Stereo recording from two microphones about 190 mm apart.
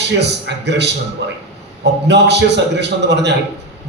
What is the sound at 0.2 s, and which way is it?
A man's voice, 65° right (ahead or behind).